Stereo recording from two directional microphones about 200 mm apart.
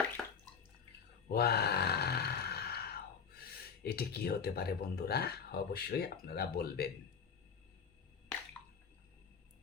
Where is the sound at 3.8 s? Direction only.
50° left (ahead or behind).